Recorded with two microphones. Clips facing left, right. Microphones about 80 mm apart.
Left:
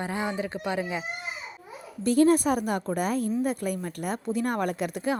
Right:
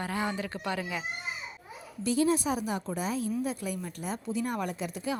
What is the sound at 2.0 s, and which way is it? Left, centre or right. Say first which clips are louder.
Speech: left 6 dB; left.